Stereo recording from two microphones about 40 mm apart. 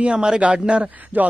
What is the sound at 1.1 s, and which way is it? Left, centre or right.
Speech, right.